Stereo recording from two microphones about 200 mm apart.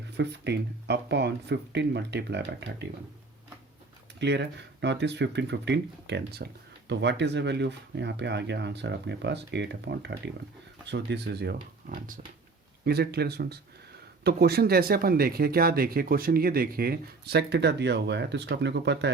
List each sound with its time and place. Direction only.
0.2 s speech: 60° right (ahead or behind)
4.2 s speech: 60° right (ahead or behind); by 12.2 s 40° right (ahead or behind)
12.8 s speech: 55° right (ahead or behind)